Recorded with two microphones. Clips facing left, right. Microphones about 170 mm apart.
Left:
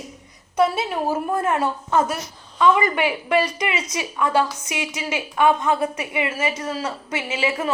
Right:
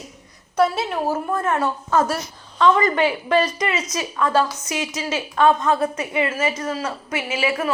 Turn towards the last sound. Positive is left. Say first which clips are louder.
# right 1 dB
turn(degrees=20)  # may be behind; listen again after turning